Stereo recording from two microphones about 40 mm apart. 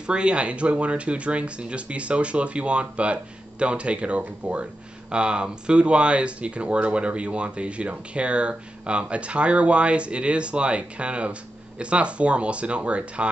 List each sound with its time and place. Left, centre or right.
0.0 s speech: right